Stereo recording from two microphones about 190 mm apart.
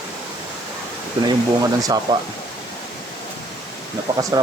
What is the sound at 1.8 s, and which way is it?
Speech, 20° right (ahead or behind).